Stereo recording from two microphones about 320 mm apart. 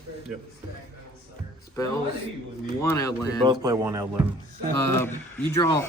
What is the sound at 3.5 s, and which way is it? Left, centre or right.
Speech, centre.